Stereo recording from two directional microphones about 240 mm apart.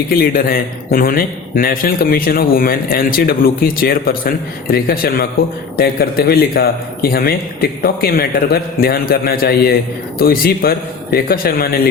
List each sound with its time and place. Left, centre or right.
0.1 s a man's voice: left